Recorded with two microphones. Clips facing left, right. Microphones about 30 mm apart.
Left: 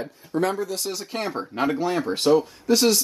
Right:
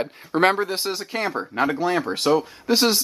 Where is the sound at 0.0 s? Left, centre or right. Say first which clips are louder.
Right 5 dB; right.